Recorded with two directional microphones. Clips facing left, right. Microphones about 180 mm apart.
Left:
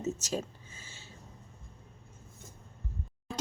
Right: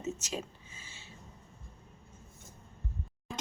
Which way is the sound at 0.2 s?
40° left (ahead or behind).